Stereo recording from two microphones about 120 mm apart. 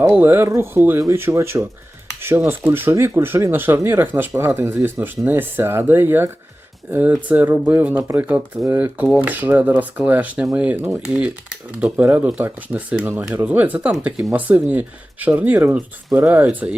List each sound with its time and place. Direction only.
0.0 s speech: 20° right (ahead or behind); by 14.3 s 5° right (ahead or behind)
14.3 s speech: 15° right (ahead or behind)